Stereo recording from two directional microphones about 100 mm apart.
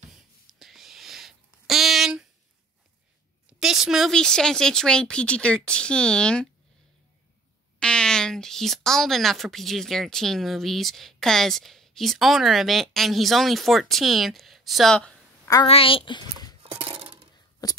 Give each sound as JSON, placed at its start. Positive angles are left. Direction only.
{"t": 0.1, "sound": "a sound", "side_deg": -5}
{"t": 3.4, "sound": "a sound", "side_deg": -5}
{"t": 4.1, "sound": "speech", "side_deg": 5}
{"t": 7.8, "sound": "speech", "side_deg": 10}
{"t": 15.6, "sound": "a child's voice", "side_deg": 65}
{"t": 16.6, "sound": "coin", "side_deg": -70}
{"t": 17.6, "sound": "speech", "side_deg": 40}